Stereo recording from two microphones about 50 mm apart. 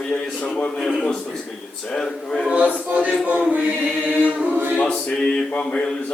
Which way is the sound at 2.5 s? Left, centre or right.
Right.